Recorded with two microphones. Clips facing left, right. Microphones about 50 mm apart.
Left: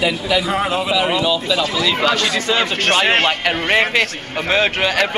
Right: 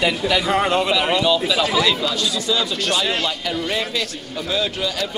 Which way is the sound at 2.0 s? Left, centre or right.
Left.